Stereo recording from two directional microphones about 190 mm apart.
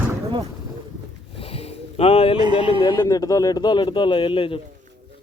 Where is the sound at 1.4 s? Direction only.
30° left (ahead or behind).